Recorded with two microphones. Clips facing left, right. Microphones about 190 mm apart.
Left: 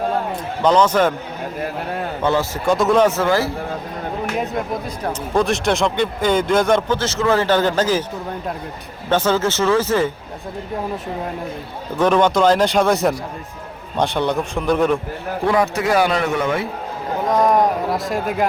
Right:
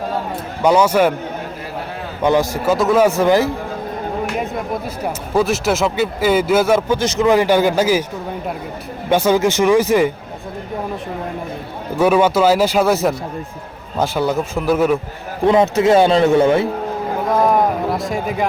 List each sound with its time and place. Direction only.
0.6 s speech: 10° right (ahead or behind)
2.2 s speech: 15° right (ahead or behind)
2.6 s speech: centre (ahead or behind)
5.0 s speech: 5° right (ahead or behind)
9.0 s speech: 10° right (ahead or behind)
11.9 s speech: 10° right (ahead or behind)
15.4 s a man's voice: 25° right (ahead or behind)
17.3 s speech: 5° right (ahead or behind)